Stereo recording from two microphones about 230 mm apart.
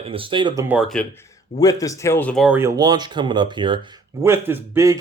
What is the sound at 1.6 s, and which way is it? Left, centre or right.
Speech, centre.